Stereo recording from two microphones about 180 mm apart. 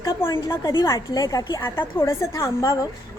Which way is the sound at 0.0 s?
15° left (ahead or behind).